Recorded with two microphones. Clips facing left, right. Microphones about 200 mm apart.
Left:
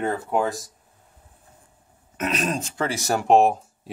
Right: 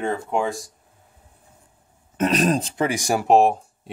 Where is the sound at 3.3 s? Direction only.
Centre (ahead or behind).